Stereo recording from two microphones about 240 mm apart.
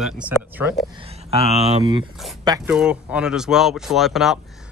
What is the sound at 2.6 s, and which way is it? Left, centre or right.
Speech, centre.